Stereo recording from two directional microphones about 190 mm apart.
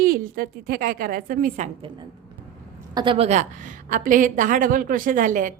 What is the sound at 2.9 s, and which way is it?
A woman's voice, 25° right (ahead or behind).